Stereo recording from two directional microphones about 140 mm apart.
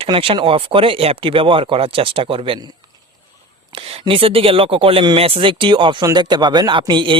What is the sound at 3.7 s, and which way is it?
Speech, 45° right (ahead or behind).